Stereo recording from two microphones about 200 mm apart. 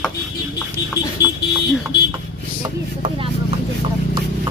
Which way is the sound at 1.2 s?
55° left (ahead or behind).